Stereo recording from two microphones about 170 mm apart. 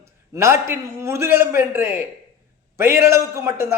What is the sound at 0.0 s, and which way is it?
A man's voice, 15° right (ahead or behind).